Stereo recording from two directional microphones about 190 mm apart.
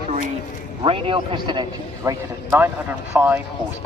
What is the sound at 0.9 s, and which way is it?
Speech, 30° right (ahead or behind).